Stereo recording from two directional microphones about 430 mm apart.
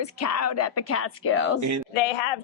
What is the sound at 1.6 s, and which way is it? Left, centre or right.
Speech, right.